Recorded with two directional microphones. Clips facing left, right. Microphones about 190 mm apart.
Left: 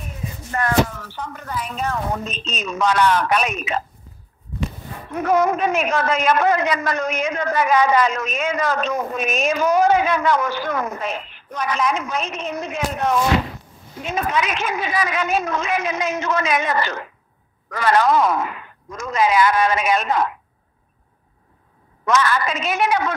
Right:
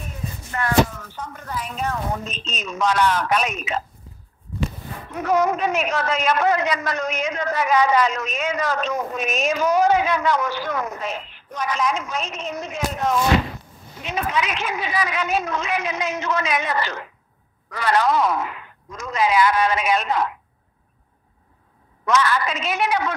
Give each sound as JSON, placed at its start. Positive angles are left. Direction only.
{"t": 0.5, "sound": "a sound", "side_deg": 45}
{"t": 0.9, "sound": "speech", "side_deg": 80}
{"t": 2.7, "sound": "a woman's voice", "side_deg": 65}
{"t": 5.2, "sound": "a woman's voice", "side_deg": 50}
{"t": 14.0, "sound": "a woman's voice", "side_deg": 45}
{"t": 22.0, "sound": "a woman's voice", "side_deg": 50}